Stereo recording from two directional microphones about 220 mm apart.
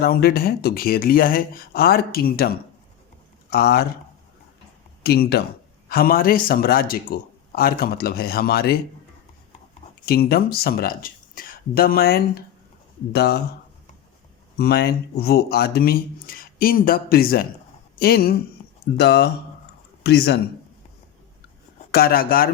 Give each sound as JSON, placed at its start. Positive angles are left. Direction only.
{"t": 0.0, "sound": "speech", "side_deg": 45}
{"t": 3.5, "sound": "speech", "side_deg": 45}
{"t": 5.0, "sound": "speech", "side_deg": 45}
{"t": 10.1, "sound": "speech", "side_deg": 45}
{"t": 14.6, "sound": "speech", "side_deg": 45}
{"t": 21.9, "sound": "speech", "side_deg": 45}